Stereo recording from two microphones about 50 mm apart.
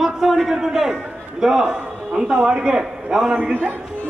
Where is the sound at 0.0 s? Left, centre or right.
Centre.